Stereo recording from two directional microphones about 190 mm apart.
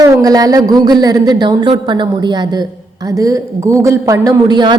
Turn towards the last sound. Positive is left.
turn(degrees=-25)  # may be behind; listen again after turning